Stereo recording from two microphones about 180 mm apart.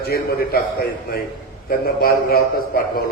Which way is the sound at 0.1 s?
60° left (ahead or behind).